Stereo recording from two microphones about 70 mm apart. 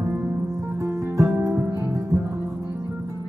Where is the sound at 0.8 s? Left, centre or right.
Right.